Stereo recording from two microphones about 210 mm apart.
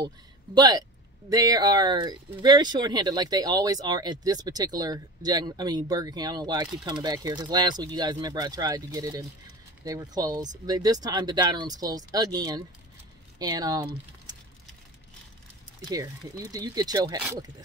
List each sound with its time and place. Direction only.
0.6 s speech: 20° right (ahead or behind)
15.8 s speech: 15° right (ahead or behind)